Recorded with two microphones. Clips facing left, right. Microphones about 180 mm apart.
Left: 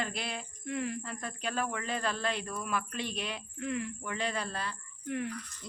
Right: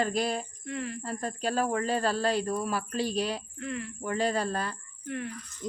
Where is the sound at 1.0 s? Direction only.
40° right (ahead or behind).